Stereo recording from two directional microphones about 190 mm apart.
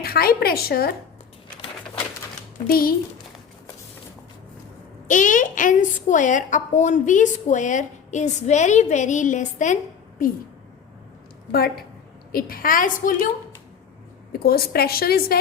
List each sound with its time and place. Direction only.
0.0 s a woman's voice: 50° left (ahead or behind)
2.6 s a woman's voice: 50° left (ahead or behind)
5.0 s a woman's voice: 40° left (ahead or behind)
12.3 s a woman's voice: 50° left (ahead or behind)
14.3 s a woman's voice: 55° left (ahead or behind)